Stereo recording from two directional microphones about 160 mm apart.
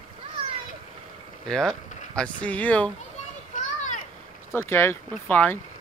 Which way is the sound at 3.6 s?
50° left (ahead or behind).